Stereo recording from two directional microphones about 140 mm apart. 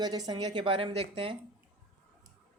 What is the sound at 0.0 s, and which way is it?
A woman's voice, 30° right (ahead or behind).